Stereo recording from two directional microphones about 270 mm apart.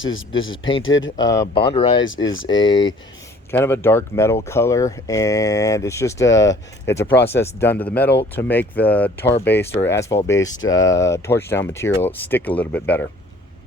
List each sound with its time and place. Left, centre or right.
0.0 s speech: left
1.1 s speech: centre
10.5 s speech: left
10.8 s speech: centre